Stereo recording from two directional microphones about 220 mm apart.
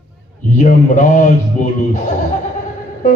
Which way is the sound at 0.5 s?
35° left (ahead or behind).